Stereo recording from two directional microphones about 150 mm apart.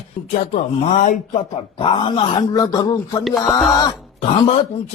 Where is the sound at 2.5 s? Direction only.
25° left (ahead or behind).